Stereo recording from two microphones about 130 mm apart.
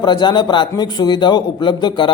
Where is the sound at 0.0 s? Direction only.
35° left (ahead or behind).